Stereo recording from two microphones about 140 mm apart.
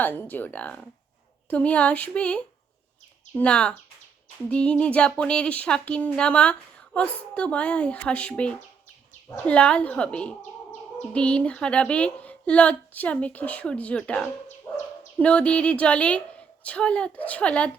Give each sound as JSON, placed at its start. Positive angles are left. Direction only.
{"t": 0.0, "sound": "speech", "side_deg": 15}
{"t": 14.7, "sound": "dog", "side_deg": 20}
{"t": 15.2, "sound": "speech", "side_deg": 10}